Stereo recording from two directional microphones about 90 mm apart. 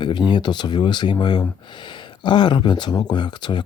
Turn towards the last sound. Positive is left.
turn(degrees=55)  # may be behind; listen again after turning